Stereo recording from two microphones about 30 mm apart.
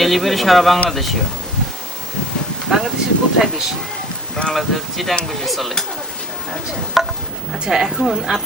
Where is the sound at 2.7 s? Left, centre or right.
Centre.